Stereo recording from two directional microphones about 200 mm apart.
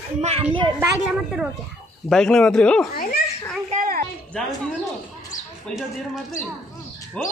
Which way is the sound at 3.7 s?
45° right (ahead or behind).